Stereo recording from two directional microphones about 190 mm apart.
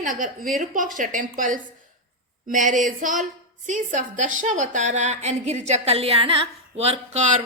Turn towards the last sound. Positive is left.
turn(degrees=-40)  # may be behind; listen again after turning